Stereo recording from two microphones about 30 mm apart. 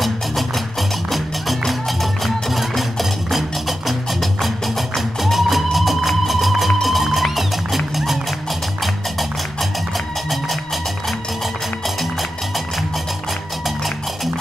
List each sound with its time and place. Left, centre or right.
0.0 s music: centre
9.6 s music: centre
12.0 s music: centre